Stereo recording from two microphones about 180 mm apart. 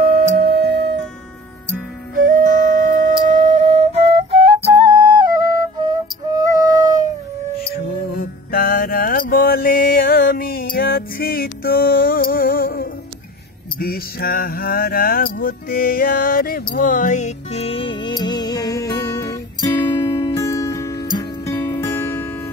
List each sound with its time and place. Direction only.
0.4 s music: 65° right (ahead or behind)
2.2 s music: 45° right (ahead or behind)
3.3 s flute: 45° right (ahead or behind); by 7.1 s 20° right (ahead or behind)
8.1 s mantra: 55° left (ahead or behind)
13.7 s a sound: 55° left (ahead or behind)
16.7 s music: 45° left (ahead or behind); by 22.3 s 15° left (ahead or behind)